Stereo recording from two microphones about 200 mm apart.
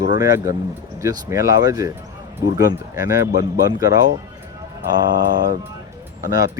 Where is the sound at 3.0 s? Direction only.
15° right (ahead or behind).